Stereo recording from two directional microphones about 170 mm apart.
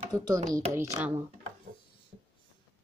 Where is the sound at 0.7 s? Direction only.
15° right (ahead or behind).